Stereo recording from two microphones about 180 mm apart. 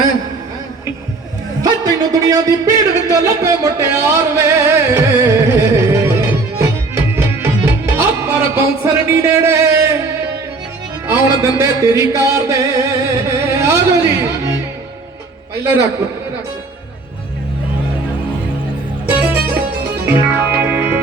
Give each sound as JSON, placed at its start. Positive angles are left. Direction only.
{"t": 1.6, "sound": "a sound", "side_deg": -20}
{"t": 11.0, "sound": "music", "side_deg": -15}
{"t": 19.0, "sound": "music", "side_deg": -10}